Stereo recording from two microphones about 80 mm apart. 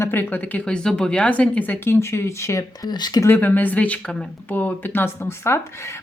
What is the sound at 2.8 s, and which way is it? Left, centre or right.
Speech, left.